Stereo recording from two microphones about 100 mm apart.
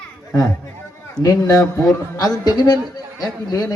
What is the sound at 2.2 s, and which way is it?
Speech, 40° left (ahead or behind).